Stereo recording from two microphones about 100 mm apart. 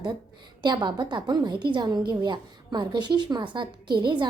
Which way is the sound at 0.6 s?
45° right (ahead or behind).